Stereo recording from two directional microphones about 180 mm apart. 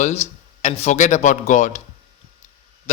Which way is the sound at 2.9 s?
40° left (ahead or behind).